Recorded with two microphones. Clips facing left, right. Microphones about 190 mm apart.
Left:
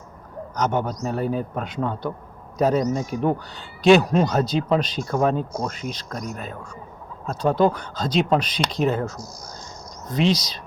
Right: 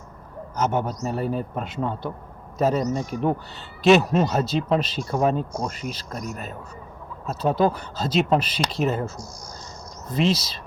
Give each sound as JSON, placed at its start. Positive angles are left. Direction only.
{"t": 0.5, "sound": "speech", "side_deg": -5}